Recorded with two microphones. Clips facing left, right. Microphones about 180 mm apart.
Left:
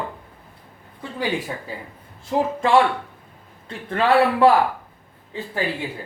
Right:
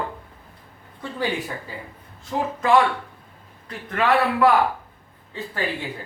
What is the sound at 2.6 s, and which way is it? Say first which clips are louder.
Speech: even; 30° left (ahead or behind).